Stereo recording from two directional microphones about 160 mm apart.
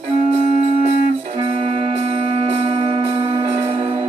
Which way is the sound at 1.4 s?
35° right (ahead or behind).